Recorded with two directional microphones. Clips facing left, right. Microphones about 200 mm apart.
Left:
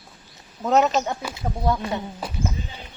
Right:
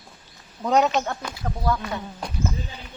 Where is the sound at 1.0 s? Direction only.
10° left (ahead or behind).